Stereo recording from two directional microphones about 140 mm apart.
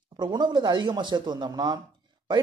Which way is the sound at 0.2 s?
30° right (ahead or behind).